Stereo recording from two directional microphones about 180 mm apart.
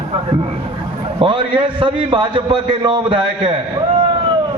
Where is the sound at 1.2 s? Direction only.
30° right (ahead or behind).